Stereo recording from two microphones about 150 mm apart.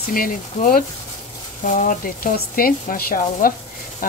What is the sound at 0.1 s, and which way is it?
Speech, 70° left (ahead or behind).